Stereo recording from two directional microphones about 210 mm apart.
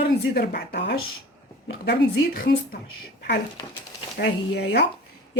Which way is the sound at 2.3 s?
50° left (ahead or behind).